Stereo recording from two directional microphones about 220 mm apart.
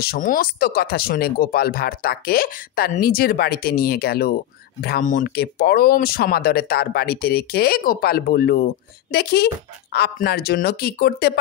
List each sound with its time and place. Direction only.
0.0 s speech: 40° left (ahead or behind)